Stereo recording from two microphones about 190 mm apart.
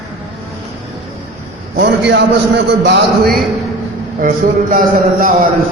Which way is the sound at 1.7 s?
65° right (ahead or behind).